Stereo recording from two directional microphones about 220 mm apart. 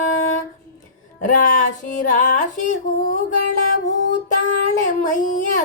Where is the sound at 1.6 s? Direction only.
35° left (ahead or behind).